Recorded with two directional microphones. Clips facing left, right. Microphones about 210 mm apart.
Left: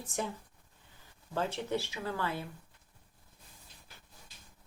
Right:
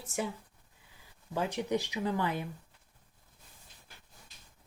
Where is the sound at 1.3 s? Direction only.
15° right (ahead or behind).